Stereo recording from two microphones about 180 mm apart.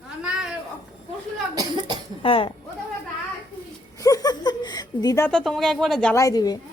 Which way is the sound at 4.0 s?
20° left (ahead or behind).